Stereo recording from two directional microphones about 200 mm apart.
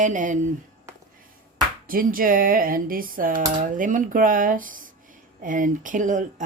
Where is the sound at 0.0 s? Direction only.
40° right (ahead or behind).